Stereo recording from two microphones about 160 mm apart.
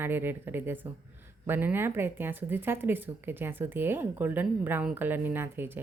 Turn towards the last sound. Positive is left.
turn(degrees=-15)  # may be behind; listen again after turning